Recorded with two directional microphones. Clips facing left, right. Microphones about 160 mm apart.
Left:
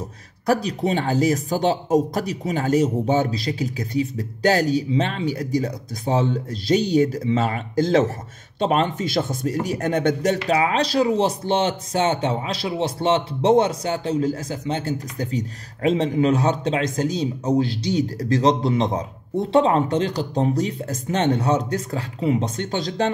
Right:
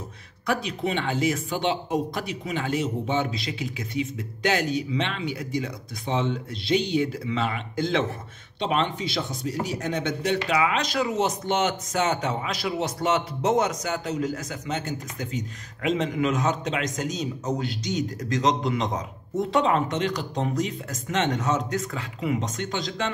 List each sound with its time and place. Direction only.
0.5 s speech: 40° left (ahead or behind)
10.5 s speech: 35° left (ahead or behind)